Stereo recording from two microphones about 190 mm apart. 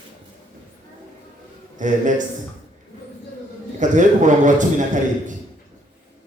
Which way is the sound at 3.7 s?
40° right (ahead or behind).